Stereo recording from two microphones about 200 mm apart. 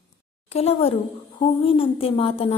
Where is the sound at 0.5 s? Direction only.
30° left (ahead or behind).